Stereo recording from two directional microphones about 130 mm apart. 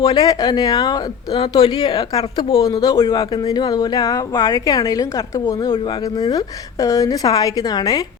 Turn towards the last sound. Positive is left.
turn(degrees=30)  # may be behind; listen again after turning